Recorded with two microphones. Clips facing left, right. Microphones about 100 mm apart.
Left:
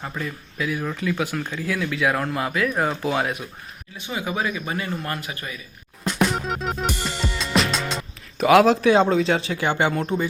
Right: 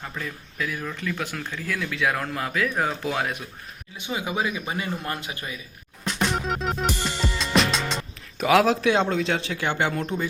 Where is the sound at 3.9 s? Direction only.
15° right (ahead or behind).